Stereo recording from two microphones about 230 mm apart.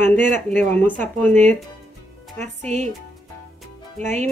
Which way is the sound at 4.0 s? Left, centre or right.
Right.